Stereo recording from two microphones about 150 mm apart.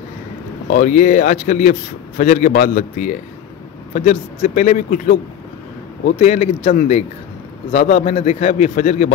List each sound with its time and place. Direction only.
0.7 s a man's voice: 60° left (ahead or behind)
6.1 s a man's voice: 45° left (ahead or behind)